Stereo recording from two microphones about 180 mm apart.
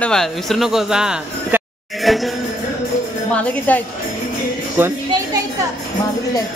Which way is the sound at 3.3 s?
5° left (ahead or behind).